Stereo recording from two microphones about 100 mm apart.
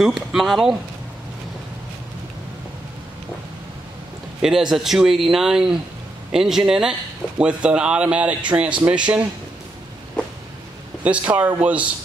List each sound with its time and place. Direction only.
0.0 s speech: 5° right (ahead or behind)
4.4 s speech: 5° right (ahead or behind)
11.1 s speech: 15° right (ahead or behind)